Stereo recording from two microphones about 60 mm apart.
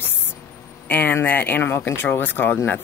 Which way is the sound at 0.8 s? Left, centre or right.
Left.